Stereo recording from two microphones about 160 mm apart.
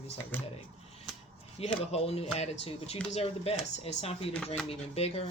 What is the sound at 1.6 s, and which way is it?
Speech, 40° left (ahead or behind).